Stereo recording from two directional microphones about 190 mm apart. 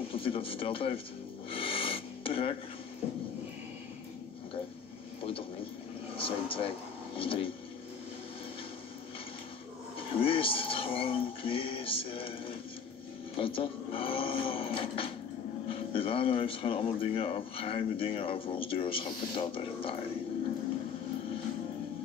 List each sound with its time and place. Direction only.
0.1 s speech: 30° left (ahead or behind)
1.5 s a sound: 30° left (ahead or behind)
6.1 s speech: 30° left (ahead or behind)
9.9 s speech: 30° left (ahead or behind)